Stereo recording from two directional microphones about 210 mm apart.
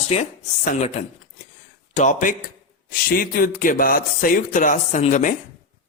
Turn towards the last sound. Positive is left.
turn(degrees=35)  # may be behind; listen again after turning